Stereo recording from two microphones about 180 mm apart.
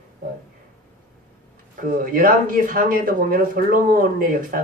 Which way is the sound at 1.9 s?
50° right (ahead or behind).